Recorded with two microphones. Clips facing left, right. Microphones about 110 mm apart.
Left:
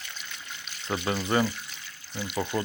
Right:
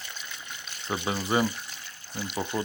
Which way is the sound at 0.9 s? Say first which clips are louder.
Left 1 dB; 10° right (ahead or behind).